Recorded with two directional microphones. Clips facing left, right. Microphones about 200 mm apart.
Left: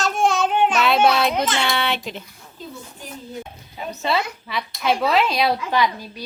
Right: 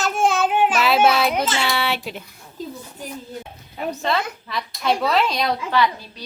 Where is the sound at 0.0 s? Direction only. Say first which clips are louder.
Even; centre (ahead or behind).